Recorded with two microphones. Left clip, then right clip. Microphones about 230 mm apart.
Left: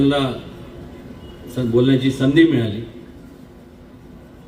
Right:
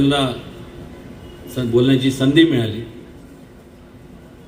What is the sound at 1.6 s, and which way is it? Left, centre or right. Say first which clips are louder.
A man's voice: right 1 dB; right.